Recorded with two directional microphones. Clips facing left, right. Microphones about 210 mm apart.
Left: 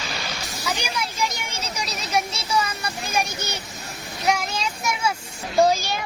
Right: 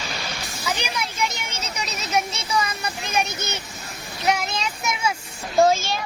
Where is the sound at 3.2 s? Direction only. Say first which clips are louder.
Right 1 dB; 10° left (ahead or behind).